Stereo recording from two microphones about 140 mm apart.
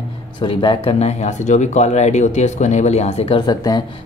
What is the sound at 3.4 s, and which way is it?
Speech, 30° left (ahead or behind).